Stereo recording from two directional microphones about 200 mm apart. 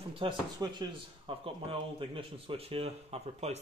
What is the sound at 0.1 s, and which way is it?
Speech, 25° right (ahead or behind).